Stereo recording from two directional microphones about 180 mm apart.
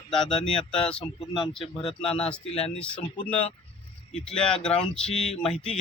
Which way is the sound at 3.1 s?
30° left (ahead or behind).